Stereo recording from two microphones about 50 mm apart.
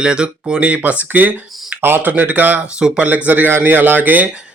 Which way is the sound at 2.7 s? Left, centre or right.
Centre.